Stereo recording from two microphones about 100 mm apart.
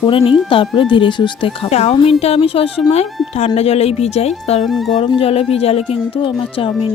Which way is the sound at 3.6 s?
90° left.